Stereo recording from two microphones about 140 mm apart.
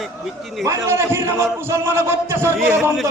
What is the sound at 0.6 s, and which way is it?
A man's voice, 20° right (ahead or behind).